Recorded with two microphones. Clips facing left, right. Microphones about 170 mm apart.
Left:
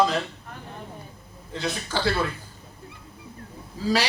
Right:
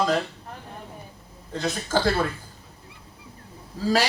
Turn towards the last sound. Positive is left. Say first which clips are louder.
# right 2 dB
turn(degrees=-45)  # may be behind; listen again after turning